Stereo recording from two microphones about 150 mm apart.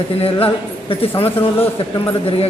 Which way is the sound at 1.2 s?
15° left (ahead or behind).